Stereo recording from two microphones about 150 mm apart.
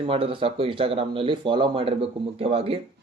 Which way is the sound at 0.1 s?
35° right (ahead or behind).